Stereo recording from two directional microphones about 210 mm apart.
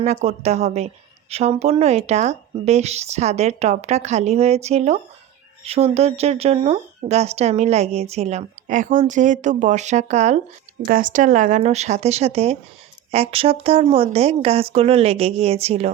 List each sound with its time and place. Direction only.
0.0 s speech: 35° right (ahead or behind)